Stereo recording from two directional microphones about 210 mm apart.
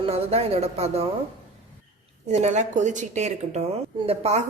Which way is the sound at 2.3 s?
35° right (ahead or behind).